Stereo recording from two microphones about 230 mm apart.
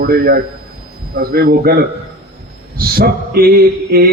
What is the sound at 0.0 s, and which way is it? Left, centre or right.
A man's voice, right.